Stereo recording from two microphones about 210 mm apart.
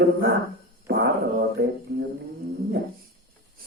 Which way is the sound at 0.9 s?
50° right (ahead or behind).